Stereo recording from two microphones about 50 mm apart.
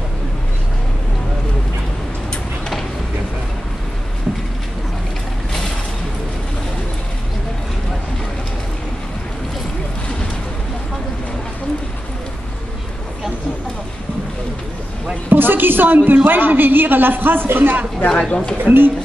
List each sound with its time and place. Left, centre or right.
15.2 s a sound: right
16.3 s a man's voice: right
18.3 s speech: left
18.6 s a man's voice: right